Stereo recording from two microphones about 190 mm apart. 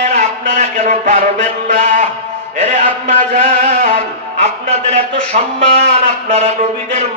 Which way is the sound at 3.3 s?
40° right (ahead or behind).